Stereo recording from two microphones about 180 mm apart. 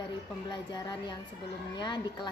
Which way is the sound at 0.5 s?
25° left (ahead or behind).